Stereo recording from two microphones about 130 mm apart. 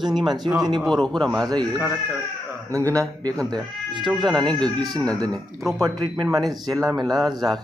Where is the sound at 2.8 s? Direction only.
25° right (ahead or behind).